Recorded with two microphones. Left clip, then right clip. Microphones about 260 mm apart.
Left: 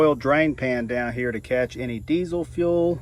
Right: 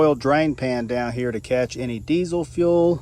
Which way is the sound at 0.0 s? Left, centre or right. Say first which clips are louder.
Right 1 dB; centre.